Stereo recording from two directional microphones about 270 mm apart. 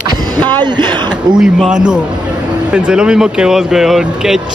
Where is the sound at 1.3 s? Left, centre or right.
Centre.